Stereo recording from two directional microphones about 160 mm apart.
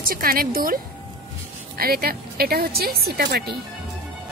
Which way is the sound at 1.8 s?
70° right (ahead or behind).